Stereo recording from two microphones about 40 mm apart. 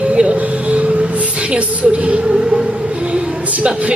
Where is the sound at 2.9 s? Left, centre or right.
Right.